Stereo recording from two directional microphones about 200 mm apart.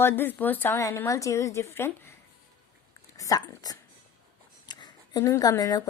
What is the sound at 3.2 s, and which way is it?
Speech, 20° left (ahead or behind).